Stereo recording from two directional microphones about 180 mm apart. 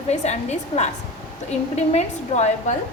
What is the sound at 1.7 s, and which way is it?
A woman's voice, 35° left (ahead or behind).